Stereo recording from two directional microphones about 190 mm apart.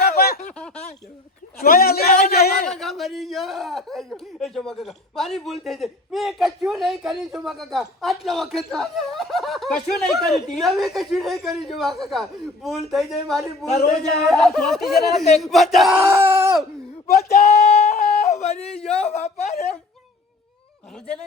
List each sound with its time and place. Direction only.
0.2 s a sound: 55° left (ahead or behind)
0.4 s a sound: 5° left (ahead or behind)
1.5 s a sound: 50° left (ahead or behind)
2.6 s speech: centre (ahead or behind)
16.0 s speech: 15° right (ahead or behind)
17.2 s speech: 55° left (ahead or behind)
17.4 s yodeling: 35° left (ahead or behind)
18.7 s speech: 5° left (ahead or behind)
19.0 s speech: 35° left (ahead or behind)